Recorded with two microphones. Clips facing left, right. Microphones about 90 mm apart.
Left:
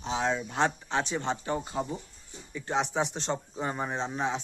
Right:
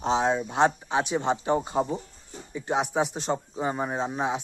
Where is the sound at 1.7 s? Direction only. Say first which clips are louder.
Right 6 dB; 30° right (ahead or behind).